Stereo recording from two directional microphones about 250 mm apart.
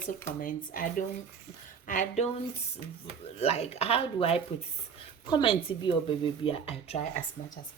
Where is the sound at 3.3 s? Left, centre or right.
Left.